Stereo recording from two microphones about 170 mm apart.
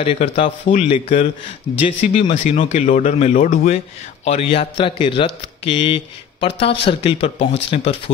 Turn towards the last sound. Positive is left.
turn(degrees=35)  # may be behind; listen again after turning